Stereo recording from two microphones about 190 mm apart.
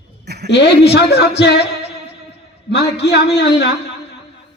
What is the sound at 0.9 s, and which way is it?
A man's voice, 60° left (ahead or behind).